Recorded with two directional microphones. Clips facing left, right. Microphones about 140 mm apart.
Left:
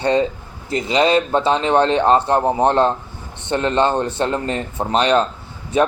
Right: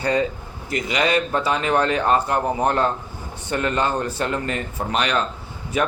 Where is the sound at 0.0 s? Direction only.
25° left (ahead or behind).